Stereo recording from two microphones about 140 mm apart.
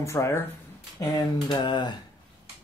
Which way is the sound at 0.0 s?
20° left (ahead or behind).